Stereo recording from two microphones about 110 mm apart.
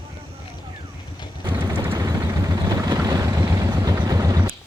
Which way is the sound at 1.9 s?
35° right (ahead or behind).